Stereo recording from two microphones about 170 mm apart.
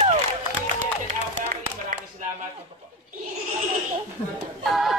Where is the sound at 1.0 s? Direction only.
50° right (ahead or behind).